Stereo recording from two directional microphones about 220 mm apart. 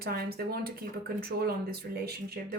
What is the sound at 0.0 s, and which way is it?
A woman's voice, 45° right (ahead or behind).